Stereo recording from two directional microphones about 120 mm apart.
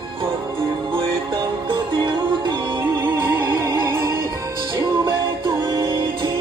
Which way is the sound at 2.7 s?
25° right (ahead or behind).